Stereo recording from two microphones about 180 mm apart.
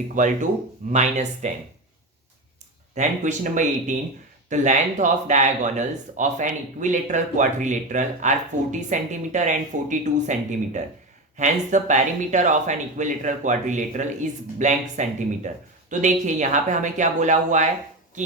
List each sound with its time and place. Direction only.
0.1 s speech: 45° right (ahead or behind)
2.9 s speech: 40° right (ahead or behind)